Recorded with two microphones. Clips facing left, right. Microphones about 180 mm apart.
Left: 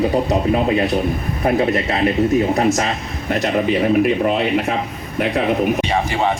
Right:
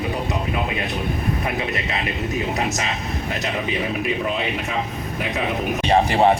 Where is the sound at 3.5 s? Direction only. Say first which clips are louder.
Left 12 dB; 50° left (ahead or behind).